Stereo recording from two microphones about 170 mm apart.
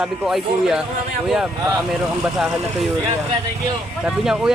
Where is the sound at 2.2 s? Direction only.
5° right (ahead or behind).